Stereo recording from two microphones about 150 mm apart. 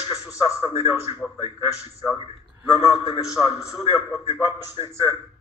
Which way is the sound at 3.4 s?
25° left (ahead or behind).